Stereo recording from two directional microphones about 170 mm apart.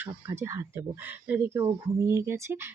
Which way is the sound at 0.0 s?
15° right (ahead or behind).